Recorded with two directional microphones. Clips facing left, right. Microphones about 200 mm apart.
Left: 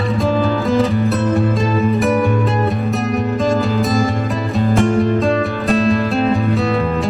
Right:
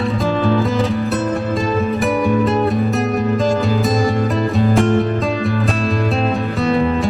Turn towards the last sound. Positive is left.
turn(degrees=0)  # may be behind; listen again after turning